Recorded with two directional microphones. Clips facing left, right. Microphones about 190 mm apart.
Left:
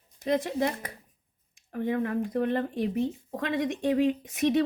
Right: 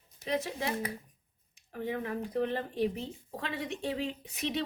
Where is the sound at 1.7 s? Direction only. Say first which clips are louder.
Left 7 dB; 50° left (ahead or behind).